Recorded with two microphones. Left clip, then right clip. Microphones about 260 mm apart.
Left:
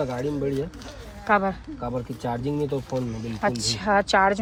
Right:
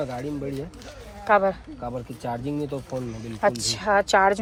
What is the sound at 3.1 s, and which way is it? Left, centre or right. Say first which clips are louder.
Speech: right 6 dB; centre.